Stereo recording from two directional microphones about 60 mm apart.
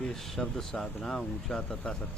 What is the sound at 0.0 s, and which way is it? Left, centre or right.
Speech, centre.